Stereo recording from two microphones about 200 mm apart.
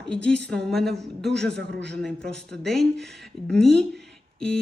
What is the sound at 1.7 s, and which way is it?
Speech, 60° right (ahead or behind).